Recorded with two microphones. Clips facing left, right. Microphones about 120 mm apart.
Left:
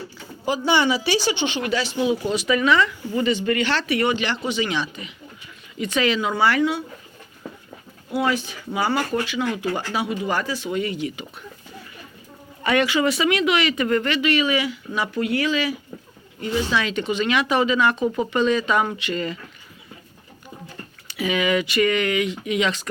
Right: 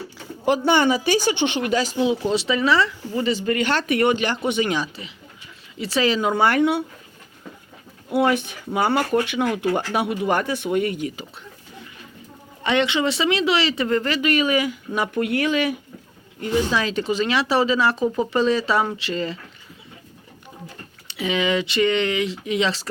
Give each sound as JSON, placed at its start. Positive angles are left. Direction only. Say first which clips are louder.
{"t": 0.4, "sound": "speech", "louder": "right 2 dB", "side_deg": -55}
{"t": 2.0, "sound": "speech", "louder": "right 1 dB", "side_deg": -30}
{"t": 5.8, "sound": "speech", "louder": "right 1 dB", "side_deg": -35}
{"t": 8.1, "sound": "speech", "louder": "right 3 dB", "side_deg": -60}
{"t": 12.6, "sound": "speech", "louder": "left 1 dB", "side_deg": -25}
{"t": 16.4, "sound": "speech", "louder": "right 2 dB", "side_deg": -35}
{"t": 21.1, "sound": "speech", "louder": "even", "side_deg": -25}